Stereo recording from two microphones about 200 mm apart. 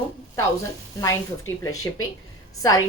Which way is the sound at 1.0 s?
15° left (ahead or behind).